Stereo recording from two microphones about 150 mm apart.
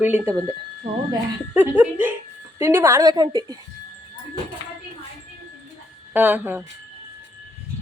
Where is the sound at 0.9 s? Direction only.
40° right (ahead or behind).